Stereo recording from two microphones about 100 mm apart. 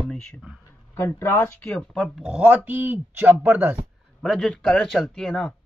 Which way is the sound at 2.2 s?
10° right (ahead or behind).